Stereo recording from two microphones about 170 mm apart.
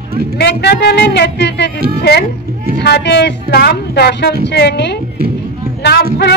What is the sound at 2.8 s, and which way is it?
Speech, 75° left (ahead or behind).